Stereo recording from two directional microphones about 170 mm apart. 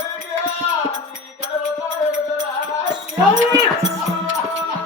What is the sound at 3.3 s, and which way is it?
Music, 90° right.